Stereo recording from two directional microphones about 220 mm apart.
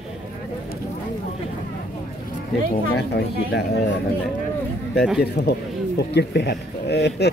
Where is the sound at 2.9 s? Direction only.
50° left (ahead or behind).